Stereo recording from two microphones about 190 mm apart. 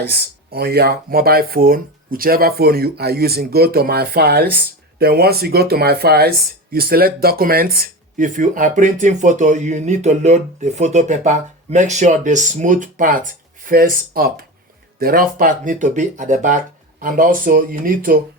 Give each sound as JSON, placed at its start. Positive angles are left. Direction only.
{"t": 0.0, "sound": "speech", "side_deg": -55}